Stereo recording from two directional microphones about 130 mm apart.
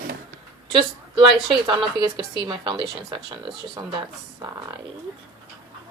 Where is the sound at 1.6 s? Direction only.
35° right (ahead or behind).